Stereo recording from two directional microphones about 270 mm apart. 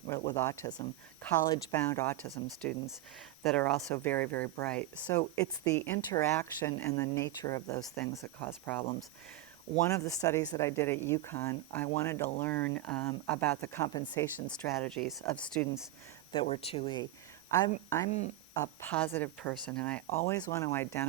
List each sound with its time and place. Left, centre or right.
0.1 s speech: centre
9.9 s speech: centre
14.4 s speech: centre
16.3 s speech: left